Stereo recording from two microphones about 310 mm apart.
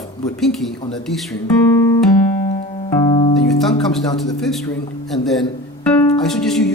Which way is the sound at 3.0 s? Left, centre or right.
Centre.